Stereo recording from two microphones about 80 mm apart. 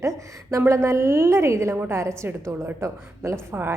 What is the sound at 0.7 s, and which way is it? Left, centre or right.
A woman's voice, right.